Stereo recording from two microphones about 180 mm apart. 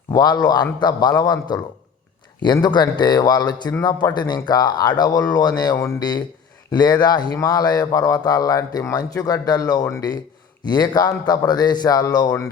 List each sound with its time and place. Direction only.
0.1 s speech: 25° left (ahead or behind)